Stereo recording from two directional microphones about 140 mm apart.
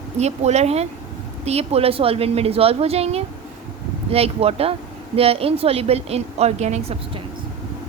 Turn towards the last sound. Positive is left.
turn(degrees=-50)  # may be behind; listen again after turning